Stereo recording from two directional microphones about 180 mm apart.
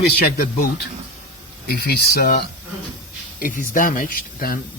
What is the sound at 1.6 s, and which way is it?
Speech, 55° left (ahead or behind).